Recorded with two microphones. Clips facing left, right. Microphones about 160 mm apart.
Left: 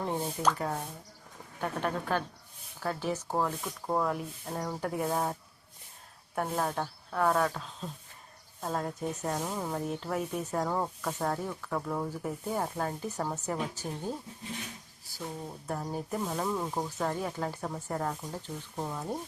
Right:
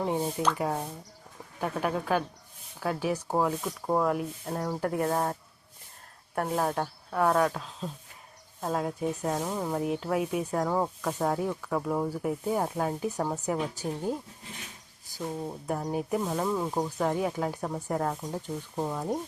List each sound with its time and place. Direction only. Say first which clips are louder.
0.0 s speech: right 2 dB; 10° right (ahead or behind)